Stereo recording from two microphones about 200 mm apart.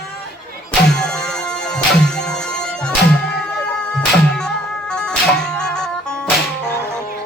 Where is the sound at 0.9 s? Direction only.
5° left (ahead or behind).